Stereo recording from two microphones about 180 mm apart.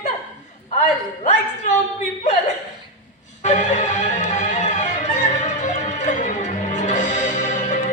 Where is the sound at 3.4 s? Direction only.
40° left (ahead or behind).